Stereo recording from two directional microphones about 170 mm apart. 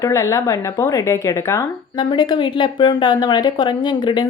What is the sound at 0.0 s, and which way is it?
Speech, 20° left (ahead or behind).